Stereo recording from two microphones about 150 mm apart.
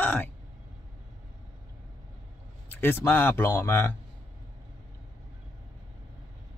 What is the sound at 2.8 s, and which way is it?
A man's voice, 15° left (ahead or behind).